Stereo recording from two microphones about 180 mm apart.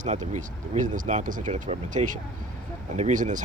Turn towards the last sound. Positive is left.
turn(degrees=-45)  # may be behind; listen again after turning